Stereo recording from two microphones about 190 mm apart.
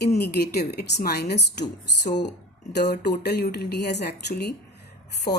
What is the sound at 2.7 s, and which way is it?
Speech, 60° left (ahead or behind).